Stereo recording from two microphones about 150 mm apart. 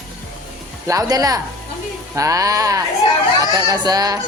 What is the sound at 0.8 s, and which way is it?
A man's voice, 20° right (ahead or behind).